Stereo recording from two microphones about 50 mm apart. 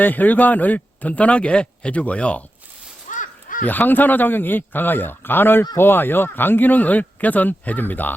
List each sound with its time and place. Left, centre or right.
0.0 s a man's voice: left
3.7 s a man's voice: left